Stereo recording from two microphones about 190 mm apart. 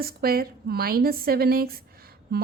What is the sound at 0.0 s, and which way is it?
A woman's voice, 55° right (ahead or behind).